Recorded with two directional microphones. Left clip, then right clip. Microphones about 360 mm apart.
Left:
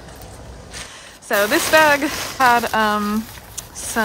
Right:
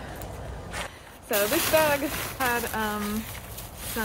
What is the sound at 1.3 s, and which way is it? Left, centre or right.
Speech, left.